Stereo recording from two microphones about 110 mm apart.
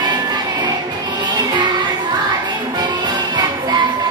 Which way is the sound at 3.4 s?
40° right (ahead or behind).